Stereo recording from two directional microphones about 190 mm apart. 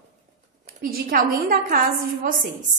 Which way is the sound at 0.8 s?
50° right (ahead or behind).